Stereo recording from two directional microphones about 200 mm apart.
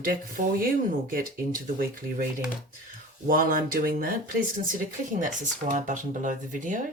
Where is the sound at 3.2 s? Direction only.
45° right (ahead or behind).